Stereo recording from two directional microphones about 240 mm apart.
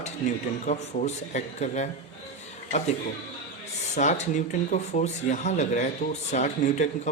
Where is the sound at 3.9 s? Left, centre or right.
Left.